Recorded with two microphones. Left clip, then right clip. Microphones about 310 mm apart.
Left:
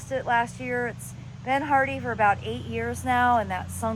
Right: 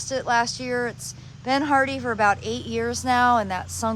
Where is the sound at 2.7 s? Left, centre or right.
Centre.